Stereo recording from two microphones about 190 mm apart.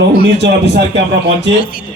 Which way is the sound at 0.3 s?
60° right (ahead or behind).